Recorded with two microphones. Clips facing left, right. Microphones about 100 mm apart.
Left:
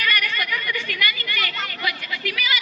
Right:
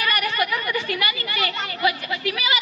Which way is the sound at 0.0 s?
25° right (ahead or behind).